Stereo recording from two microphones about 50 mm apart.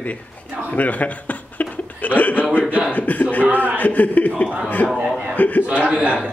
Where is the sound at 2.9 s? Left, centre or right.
Left.